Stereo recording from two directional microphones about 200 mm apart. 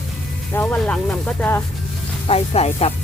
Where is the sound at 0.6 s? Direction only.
5° left (ahead or behind).